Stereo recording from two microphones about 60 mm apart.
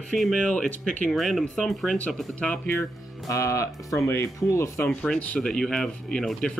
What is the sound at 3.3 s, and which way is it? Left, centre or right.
Speech, left.